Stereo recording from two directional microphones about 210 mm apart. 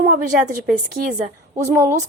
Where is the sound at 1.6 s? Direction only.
10° right (ahead or behind).